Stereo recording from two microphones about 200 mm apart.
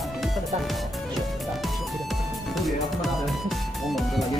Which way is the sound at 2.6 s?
Centre (ahead or behind).